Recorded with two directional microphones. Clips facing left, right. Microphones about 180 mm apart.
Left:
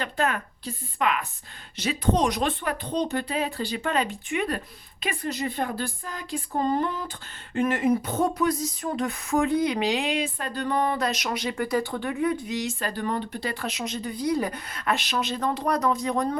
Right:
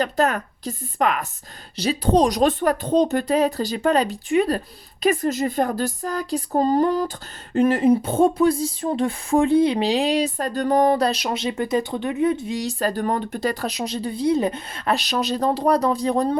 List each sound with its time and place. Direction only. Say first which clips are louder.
0.0 s speech: right 6 dB; 40° right (ahead or behind)